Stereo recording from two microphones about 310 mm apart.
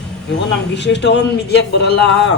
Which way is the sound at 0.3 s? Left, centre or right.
Left.